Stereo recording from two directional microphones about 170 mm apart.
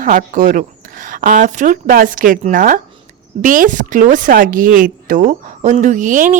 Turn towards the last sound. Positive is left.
turn(degrees=-50)  # may be behind; listen again after turning